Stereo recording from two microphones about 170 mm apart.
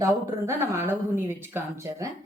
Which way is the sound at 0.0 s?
15° right (ahead or behind).